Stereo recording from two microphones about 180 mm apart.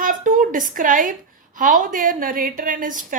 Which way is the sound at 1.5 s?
50° right (ahead or behind).